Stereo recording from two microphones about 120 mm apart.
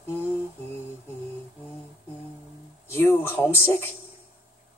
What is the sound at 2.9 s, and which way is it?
Speech, 20° left (ahead or behind).